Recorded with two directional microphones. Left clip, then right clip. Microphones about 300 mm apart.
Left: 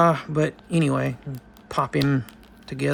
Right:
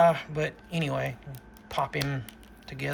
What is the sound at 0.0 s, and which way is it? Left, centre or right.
Speech, centre.